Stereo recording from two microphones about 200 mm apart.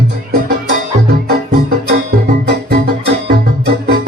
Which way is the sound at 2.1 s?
50° right (ahead or behind).